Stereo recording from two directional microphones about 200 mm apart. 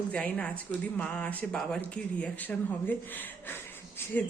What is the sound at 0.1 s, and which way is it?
Speech, 5° left (ahead or behind).